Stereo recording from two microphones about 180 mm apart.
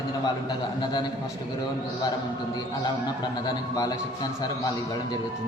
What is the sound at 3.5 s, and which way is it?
Speech, 20° left (ahead or behind).